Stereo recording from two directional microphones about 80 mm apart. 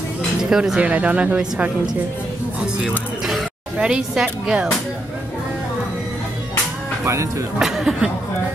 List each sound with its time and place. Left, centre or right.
0.4 s speech: centre
3.7 s speech: centre
7.1 s speech: right
7.5 s speech: centre